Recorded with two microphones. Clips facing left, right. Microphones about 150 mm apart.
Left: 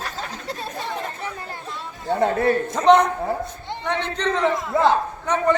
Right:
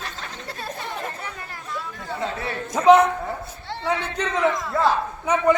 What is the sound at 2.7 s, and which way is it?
A man's voice, 5° right (ahead or behind).